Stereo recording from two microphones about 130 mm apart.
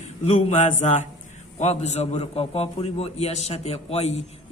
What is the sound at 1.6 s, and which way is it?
A man's voice, 60° left (ahead or behind).